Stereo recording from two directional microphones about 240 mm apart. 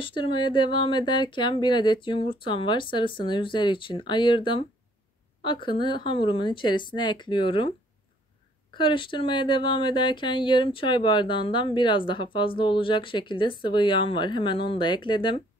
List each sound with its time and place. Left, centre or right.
0.0 s speech: left
8.7 s speech: left